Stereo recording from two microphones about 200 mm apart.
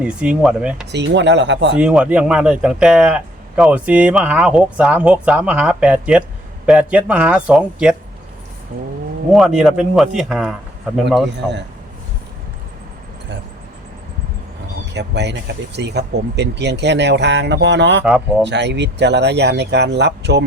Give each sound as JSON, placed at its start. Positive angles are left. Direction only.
{"t": 0.0, "sound": "speech", "side_deg": -5}
{"t": 0.9, "sound": "speech", "side_deg": -60}
{"t": 1.7, "sound": "speech", "side_deg": -5}
{"t": 9.3, "sound": "speech", "side_deg": 0}
{"t": 14.9, "sound": "speech", "side_deg": -60}